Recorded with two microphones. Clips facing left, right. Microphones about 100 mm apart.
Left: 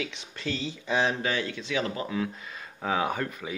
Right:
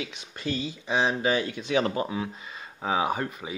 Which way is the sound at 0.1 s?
15° right (ahead or behind).